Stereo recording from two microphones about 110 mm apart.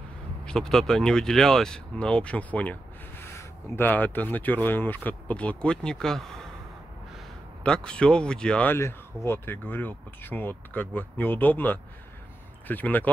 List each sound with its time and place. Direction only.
0.5 s speech: 5° left (ahead or behind)
7.6 s speech: 10° left (ahead or behind)
8.7 s speech: 25° left (ahead or behind)